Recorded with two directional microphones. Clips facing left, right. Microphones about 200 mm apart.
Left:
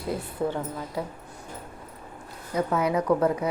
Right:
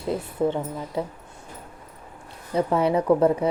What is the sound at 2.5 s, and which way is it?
Speech, 30° right (ahead or behind).